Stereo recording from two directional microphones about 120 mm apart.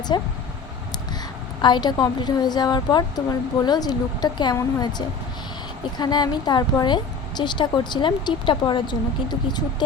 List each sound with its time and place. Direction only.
0.1 s a woman's voice: 40° left (ahead or behind)
1.6 s a woman's voice: 40° left (ahead or behind)